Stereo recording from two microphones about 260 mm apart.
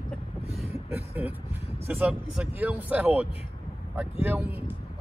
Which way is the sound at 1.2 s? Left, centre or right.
Centre.